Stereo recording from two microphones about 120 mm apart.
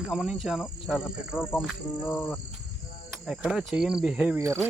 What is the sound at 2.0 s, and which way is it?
Cricket, 15° left (ahead or behind).